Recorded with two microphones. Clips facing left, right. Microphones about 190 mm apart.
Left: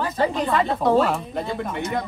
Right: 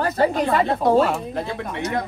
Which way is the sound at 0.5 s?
Centre (ahead or behind).